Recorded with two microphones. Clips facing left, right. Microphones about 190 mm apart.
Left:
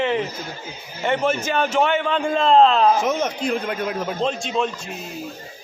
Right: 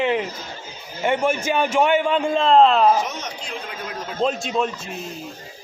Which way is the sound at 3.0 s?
55° left (ahead or behind).